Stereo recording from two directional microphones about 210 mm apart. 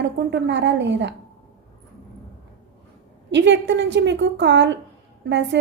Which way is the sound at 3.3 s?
55° right (ahead or behind).